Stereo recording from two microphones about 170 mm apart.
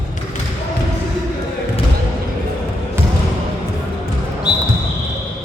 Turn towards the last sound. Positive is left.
turn(degrees=25)  # may be behind; listen again after turning